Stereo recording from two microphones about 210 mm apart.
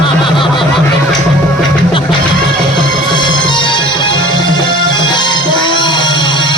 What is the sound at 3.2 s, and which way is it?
Music, 20° left (ahead or behind).